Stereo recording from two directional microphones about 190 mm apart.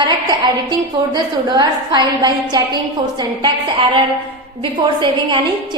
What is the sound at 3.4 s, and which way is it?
Speech, 25° right (ahead or behind).